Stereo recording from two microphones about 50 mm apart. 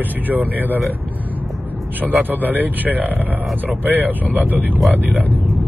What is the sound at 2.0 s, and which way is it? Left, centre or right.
Speech, right.